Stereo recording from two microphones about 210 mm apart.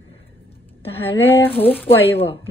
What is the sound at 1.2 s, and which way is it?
Speech, 10° left (ahead or behind).